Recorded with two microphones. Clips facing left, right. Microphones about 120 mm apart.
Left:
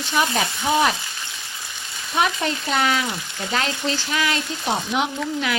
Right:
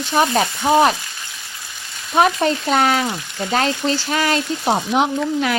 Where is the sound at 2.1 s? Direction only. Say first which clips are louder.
Right 6 dB; 40° right (ahead or behind).